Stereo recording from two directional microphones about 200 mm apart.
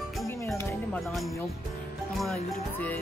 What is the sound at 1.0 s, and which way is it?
Speech, centre (ahead or behind).